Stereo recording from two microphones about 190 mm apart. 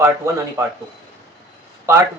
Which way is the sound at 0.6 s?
15° right (ahead or behind).